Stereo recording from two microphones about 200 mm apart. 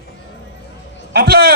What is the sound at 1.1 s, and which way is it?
Speech, 50° right (ahead or behind).